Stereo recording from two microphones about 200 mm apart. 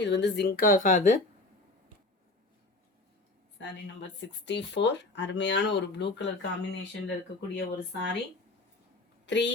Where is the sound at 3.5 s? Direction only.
65° left (ahead or behind).